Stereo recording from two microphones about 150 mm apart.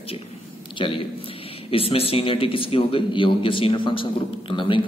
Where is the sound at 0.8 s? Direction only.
35° left (ahead or behind).